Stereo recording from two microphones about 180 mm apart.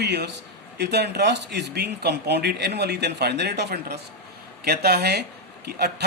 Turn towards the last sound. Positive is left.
turn(degrees=-65)  # may be behind; listen again after turning